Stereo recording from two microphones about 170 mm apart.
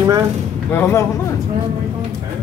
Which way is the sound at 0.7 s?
15° left (ahead or behind).